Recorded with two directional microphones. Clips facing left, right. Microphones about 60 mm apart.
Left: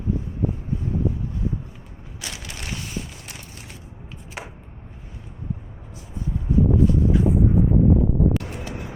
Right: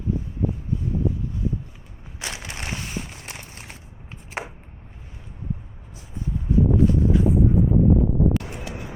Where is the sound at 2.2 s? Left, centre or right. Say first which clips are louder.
Right 3 dB; right.